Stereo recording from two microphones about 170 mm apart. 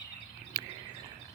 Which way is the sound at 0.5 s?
20° right (ahead or behind).